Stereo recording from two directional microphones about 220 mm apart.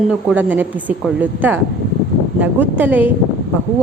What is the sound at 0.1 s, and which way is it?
A woman's voice, 5° right (ahead or behind).